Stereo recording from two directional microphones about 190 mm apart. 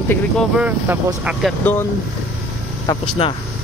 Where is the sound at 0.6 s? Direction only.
10° right (ahead or behind).